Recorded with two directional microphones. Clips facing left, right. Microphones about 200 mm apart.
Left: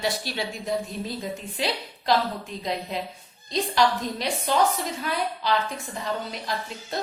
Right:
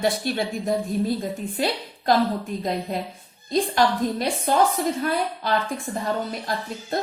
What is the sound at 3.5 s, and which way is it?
A woman's voice, 50° right (ahead or behind).